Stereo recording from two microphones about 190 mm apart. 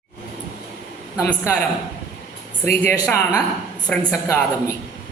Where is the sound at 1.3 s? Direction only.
5° left (ahead or behind).